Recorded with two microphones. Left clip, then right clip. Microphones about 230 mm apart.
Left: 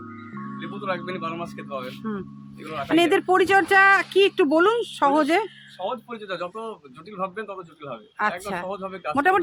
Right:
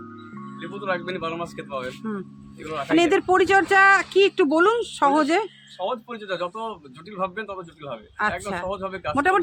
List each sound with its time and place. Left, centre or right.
0.6 s speech: centre
1.9 s speech: centre
8.4 s speech: centre
8.7 s speech: centre
9.1 s speech: centre